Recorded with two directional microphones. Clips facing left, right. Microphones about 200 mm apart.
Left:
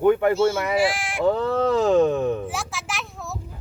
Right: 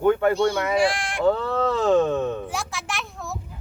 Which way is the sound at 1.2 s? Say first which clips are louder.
Left 1 dB; 15° left (ahead or behind).